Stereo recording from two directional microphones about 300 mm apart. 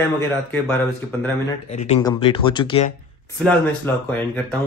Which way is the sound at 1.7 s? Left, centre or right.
Left.